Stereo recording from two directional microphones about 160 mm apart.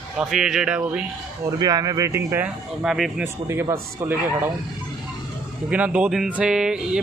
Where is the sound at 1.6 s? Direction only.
25° right (ahead or behind); by 3.3 s 5° right (ahead or behind).